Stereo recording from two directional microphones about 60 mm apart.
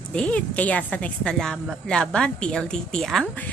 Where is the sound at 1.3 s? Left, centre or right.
Centre.